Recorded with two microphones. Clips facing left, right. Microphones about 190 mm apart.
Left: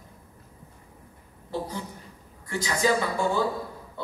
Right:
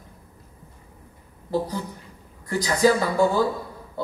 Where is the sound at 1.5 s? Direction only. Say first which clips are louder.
Right 6 dB; 40° right (ahead or behind).